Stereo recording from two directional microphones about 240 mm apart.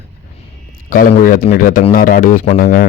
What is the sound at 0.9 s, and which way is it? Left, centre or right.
Speech, left.